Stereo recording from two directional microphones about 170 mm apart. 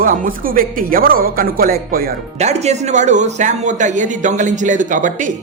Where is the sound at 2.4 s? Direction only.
40° right (ahead or behind).